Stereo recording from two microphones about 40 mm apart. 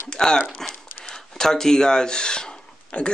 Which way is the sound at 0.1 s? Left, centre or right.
Centre.